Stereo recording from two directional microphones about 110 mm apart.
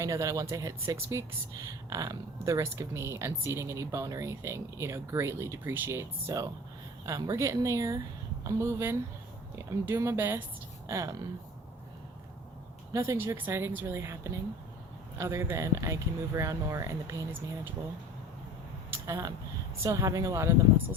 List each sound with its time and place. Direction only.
0.0 s speech: 30° right (ahead or behind)
12.9 s speech: 25° right (ahead or behind)
19.0 s speech: 30° right (ahead or behind)